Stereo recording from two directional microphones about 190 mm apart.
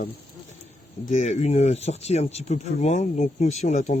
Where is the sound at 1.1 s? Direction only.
35° left (ahead or behind).